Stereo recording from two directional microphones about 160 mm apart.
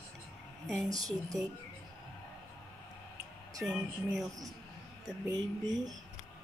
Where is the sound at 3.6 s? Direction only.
5° right (ahead or behind).